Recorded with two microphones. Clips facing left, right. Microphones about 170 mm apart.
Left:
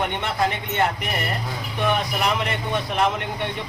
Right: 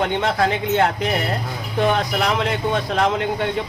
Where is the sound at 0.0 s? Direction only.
90° right.